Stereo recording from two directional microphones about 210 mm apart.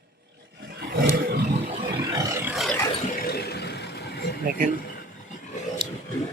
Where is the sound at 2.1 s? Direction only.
15° right (ahead or behind).